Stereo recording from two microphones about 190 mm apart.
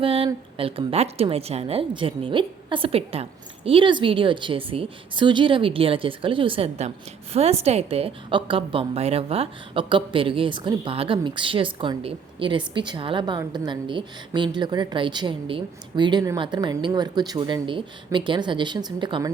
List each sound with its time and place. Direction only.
0.0 s a woman's voice: 30° right (ahead or behind)